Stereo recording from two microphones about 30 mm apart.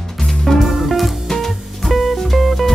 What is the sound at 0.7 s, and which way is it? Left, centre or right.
Music, centre.